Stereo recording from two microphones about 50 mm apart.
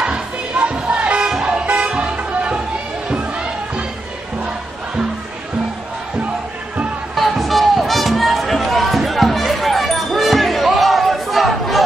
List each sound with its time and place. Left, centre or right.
0.0 s music: right
1.3 s vehicle: centre
3.1 s a sound: right
7.2 s music: centre